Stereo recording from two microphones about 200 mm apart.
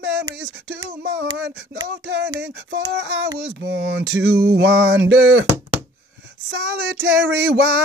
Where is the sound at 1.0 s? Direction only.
65° right (ahead or behind).